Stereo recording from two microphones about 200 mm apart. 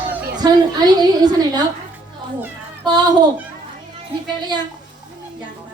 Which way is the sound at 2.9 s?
20° right (ahead or behind).